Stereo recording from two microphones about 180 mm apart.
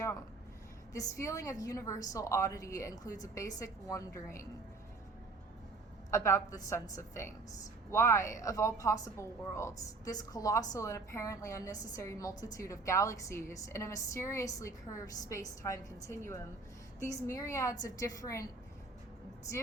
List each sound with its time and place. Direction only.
0.9 s a woman's voice: 15° left (ahead or behind)
6.1 s a woman's voice: 15° left (ahead or behind)